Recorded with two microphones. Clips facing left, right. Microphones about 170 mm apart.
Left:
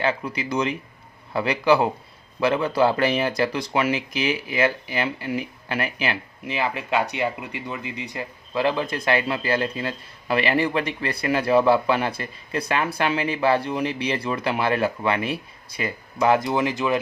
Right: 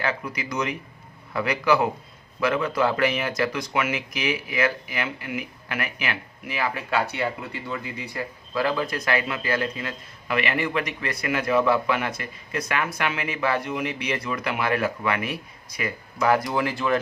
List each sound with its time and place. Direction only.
0.0 s speech: 30° left (ahead or behind)